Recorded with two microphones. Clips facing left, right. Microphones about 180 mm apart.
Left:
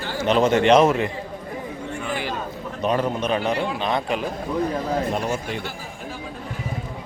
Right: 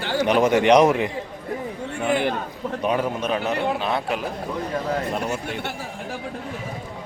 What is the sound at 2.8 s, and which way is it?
Speech, 10° right (ahead or behind).